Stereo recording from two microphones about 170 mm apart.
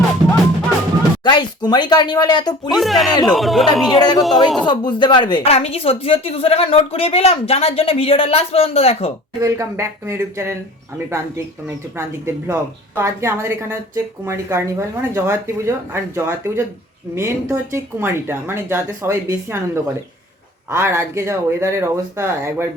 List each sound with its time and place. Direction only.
1.2 s speech: 25° left (ahead or behind)
2.6 s speech: centre (ahead or behind)
4.6 s a woman's voice: 25° left (ahead or behind)
9.4 s a woman's voice: 15° right (ahead or behind)